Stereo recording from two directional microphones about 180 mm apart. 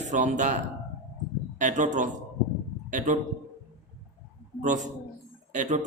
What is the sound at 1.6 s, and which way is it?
A man's voice, 45° right (ahead or behind).